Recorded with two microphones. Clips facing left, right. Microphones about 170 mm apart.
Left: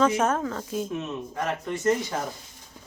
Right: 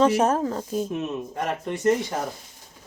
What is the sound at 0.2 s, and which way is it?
Speech, 35° right (ahead or behind).